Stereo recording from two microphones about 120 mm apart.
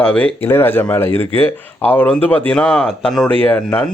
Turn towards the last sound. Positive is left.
turn(degrees=15)  # may be behind; listen again after turning